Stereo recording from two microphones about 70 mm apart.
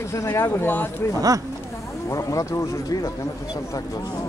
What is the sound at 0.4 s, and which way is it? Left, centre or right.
Speech, left.